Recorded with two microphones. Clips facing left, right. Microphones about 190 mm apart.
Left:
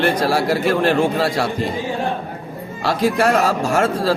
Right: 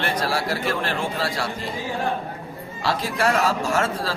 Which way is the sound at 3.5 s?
50° left (ahead or behind).